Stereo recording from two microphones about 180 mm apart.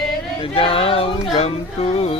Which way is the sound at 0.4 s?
30° left (ahead or behind).